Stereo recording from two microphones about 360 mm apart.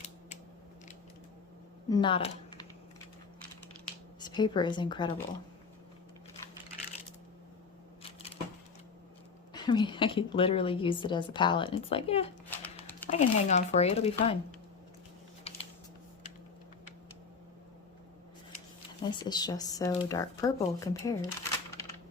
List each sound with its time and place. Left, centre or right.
1.9 s speech: centre
4.2 s speech: centre
8.0 s a sound: centre
9.5 s a woman's voice: centre
15.5 s typing: centre
19.2 s a woman's voice: centre